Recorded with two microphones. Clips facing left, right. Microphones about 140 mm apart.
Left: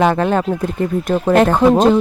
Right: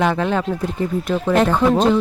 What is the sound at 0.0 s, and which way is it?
Speech, 45° left (ahead or behind).